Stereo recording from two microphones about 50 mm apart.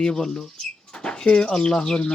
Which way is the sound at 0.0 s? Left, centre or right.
Centre.